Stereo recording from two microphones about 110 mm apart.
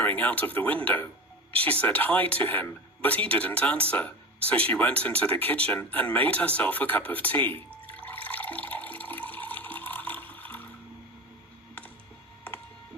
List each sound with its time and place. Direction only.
0.0 s speech: 15° left (ahead or behind)
7.9 s toilet flush: 15° left (ahead or behind)